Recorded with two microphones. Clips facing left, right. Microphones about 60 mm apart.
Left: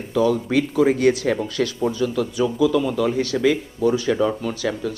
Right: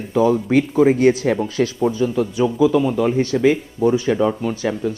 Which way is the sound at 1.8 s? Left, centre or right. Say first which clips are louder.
Right 3 dB; right.